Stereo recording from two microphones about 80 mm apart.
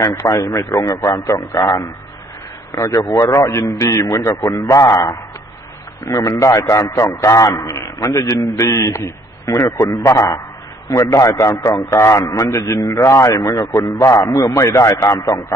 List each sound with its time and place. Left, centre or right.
0.0 s a man's voice: left